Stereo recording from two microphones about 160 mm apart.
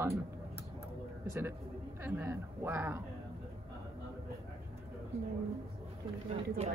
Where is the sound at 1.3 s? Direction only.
15° right (ahead or behind).